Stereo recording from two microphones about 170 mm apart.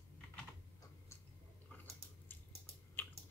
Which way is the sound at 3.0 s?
10° left (ahead or behind).